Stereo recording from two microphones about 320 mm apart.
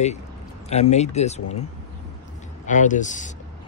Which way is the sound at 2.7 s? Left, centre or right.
Left.